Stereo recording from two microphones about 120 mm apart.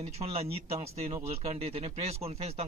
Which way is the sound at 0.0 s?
60° right (ahead or behind).